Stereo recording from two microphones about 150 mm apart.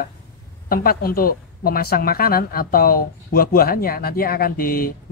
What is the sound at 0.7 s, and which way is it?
A woman's voice, 75° left (ahead or behind).